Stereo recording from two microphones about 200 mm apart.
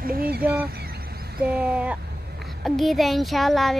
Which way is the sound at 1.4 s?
5° right (ahead or behind).